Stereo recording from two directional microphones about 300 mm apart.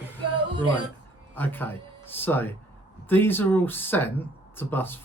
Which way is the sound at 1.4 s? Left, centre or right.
Centre.